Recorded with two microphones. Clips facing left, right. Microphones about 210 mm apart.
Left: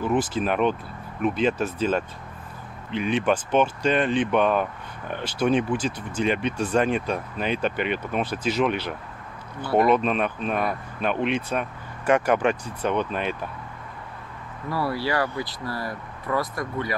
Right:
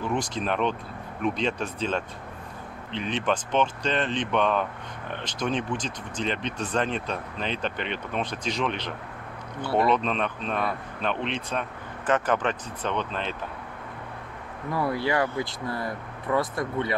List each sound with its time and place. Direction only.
0.0 s speech: 5° left (ahead or behind)
14.7 s speech: 20° right (ahead or behind)